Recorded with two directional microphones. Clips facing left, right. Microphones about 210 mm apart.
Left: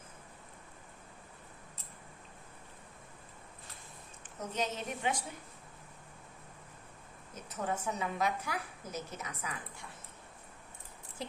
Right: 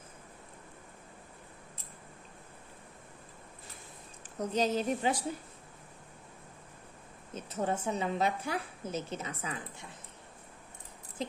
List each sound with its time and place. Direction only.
4.2 s a woman's voice: 35° right (ahead or behind)
7.3 s a woman's voice: 30° right (ahead or behind)
11.2 s a sound: 20° right (ahead or behind)